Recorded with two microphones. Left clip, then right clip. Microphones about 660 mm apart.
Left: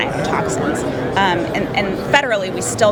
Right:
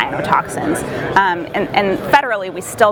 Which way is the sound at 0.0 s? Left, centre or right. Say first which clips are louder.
Right 3 dB; right.